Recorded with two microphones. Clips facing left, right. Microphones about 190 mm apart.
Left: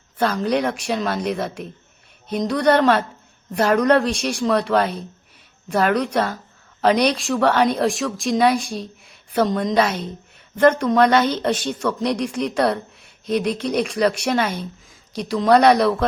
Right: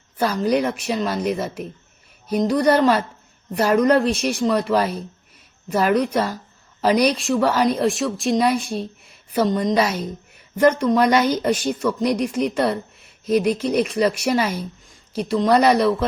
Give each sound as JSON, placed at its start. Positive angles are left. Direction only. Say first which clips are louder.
{"t": 0.2, "sound": "a woman's voice", "louder": "right 1 dB", "side_deg": -10}